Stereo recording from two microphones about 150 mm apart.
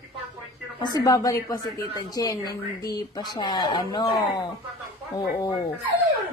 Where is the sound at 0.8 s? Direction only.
25° left (ahead or behind).